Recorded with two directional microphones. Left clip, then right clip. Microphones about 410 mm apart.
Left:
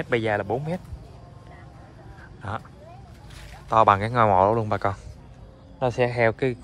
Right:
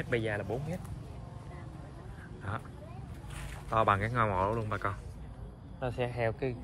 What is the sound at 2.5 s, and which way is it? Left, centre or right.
Speech, centre.